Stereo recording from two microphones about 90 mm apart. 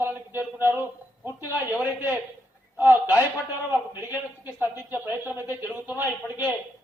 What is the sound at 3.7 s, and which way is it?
Speech, 20° right (ahead or behind).